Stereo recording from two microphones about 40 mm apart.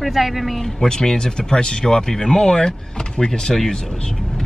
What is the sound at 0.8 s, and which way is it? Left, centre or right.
Speech, centre.